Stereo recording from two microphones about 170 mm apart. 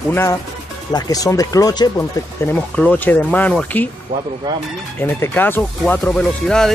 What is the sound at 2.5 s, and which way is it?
Speech, 10° left (ahead or behind).